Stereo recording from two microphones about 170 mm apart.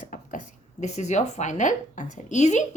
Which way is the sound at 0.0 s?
50° left (ahead or behind).